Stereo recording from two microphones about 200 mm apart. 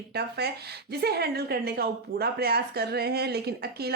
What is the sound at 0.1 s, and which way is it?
A woman's voice, 55° right (ahead or behind).